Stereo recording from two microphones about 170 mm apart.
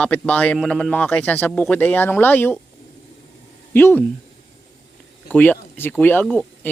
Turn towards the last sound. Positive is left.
turn(degrees=10)  # may be behind; listen again after turning